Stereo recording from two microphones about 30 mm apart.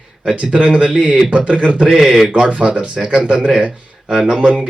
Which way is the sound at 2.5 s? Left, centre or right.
Right.